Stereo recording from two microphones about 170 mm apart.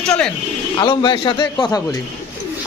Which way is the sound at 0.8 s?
25° left (ahead or behind).